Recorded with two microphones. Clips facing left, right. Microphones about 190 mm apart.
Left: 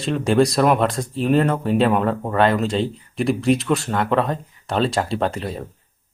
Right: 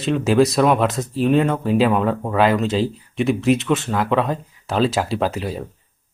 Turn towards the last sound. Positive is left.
turn(degrees=-5)  # may be behind; listen again after turning